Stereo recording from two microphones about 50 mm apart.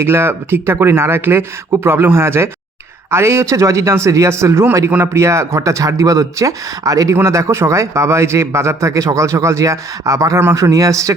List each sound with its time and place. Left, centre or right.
0.0 s speech: right
7.3 s speech: right